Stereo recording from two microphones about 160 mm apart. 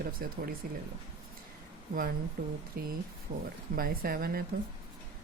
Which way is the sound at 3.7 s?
65° right (ahead or behind).